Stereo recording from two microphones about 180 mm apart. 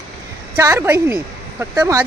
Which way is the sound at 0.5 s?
15° right (ahead or behind).